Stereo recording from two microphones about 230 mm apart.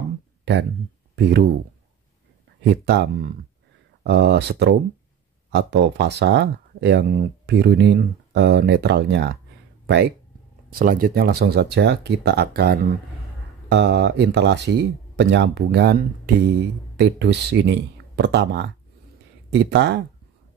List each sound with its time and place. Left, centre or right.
1.1 s speech: right
2.6 s speech: right
10.7 s speech: right